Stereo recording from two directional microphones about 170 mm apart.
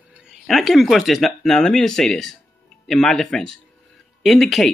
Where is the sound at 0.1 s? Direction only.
5° right (ahead or behind).